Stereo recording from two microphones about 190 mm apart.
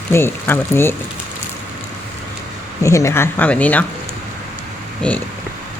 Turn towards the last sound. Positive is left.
turn(degrees=5)  # may be behind; listen again after turning